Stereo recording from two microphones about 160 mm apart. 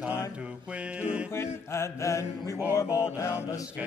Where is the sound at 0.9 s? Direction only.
5° right (ahead or behind).